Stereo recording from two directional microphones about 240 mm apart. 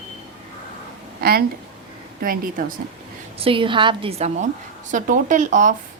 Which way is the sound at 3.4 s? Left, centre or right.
Right.